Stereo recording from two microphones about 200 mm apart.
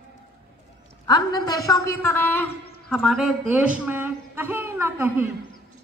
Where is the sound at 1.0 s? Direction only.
20° left (ahead or behind); by 5.3 s 10° right (ahead or behind).